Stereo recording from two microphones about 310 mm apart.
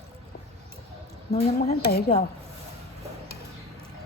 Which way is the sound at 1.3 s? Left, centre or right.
Left.